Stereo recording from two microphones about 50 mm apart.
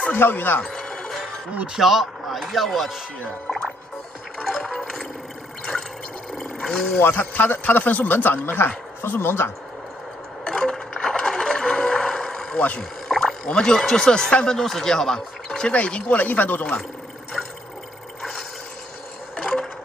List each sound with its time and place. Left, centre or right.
0.1 s a man's voice: left
0.6 s music: centre
1.7 s chopping: centre
4.4 s a sound: centre
6.4 s a sound: centre
7.2 s a man's voice: left
10.4 s a sound: centre
12.5 s speech: left
13.1 s rowboat: centre
13.5 s speech: centre
15.7 s speech: left
16.3 s a man's voice: left
19.3 s a sound: centre